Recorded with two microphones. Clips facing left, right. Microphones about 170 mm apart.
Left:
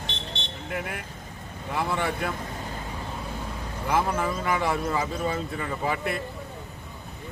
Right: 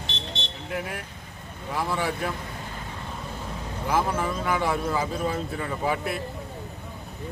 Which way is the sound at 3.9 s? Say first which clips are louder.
Even; centre (ahead or behind).